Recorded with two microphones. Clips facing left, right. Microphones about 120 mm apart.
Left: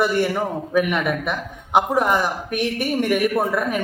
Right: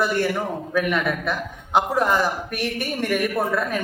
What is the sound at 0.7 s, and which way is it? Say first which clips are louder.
Speech: left 2 dB; 15° left (ahead or behind).